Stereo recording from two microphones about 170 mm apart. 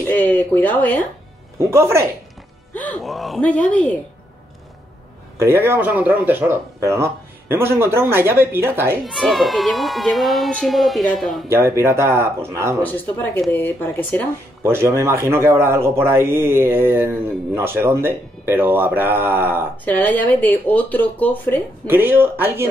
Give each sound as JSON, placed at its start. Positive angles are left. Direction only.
{"t": 0.1, "sound": "speech", "side_deg": 10}
{"t": 1.6, "sound": "a man's voice", "side_deg": -15}
{"t": 2.7, "sound": "speech", "side_deg": 10}
{"t": 5.6, "sound": "a man's voice", "side_deg": -10}
{"t": 9.0, "sound": "speech", "side_deg": 0}
{"t": 11.4, "sound": "a man's voice", "side_deg": -15}
{"t": 12.8, "sound": "speech", "side_deg": 10}
{"t": 14.6, "sound": "a man's voice", "side_deg": -15}
{"t": 19.8, "sound": "speech", "side_deg": 10}
{"t": 21.8, "sound": "a man's voice", "side_deg": -10}